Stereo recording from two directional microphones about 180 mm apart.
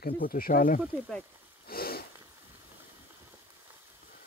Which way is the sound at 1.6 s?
55° left (ahead or behind).